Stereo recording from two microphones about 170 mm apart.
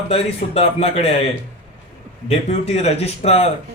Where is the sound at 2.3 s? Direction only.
40° left (ahead or behind).